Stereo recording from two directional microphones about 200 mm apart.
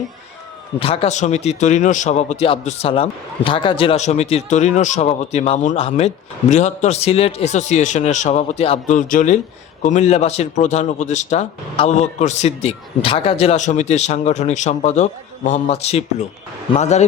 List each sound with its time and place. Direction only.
0.8 s a man's voice: 30° left (ahead or behind)